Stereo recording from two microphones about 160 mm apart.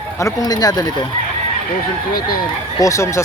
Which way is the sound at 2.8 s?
15° left (ahead or behind).